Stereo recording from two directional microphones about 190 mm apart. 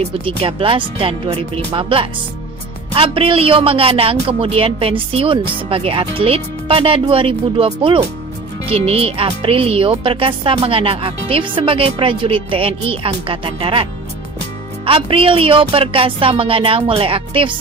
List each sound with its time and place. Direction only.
0.0 s speech: 25° right (ahead or behind)
14.8 s speech: 30° right (ahead or behind)